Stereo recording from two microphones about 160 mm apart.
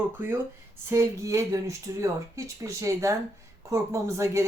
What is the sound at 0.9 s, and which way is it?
A woman's voice, 20° right (ahead or behind).